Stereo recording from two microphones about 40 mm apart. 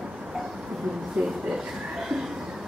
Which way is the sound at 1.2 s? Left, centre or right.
Right.